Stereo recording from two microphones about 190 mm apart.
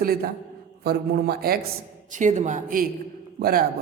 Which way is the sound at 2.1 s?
40° right (ahead or behind).